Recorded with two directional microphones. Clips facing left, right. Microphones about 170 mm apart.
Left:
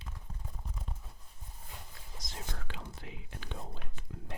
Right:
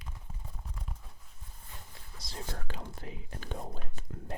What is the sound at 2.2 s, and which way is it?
Whispering, 35° right (ahead or behind).